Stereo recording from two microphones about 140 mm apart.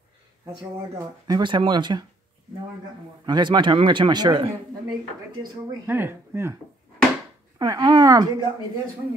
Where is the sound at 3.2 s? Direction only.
30° right (ahead or behind).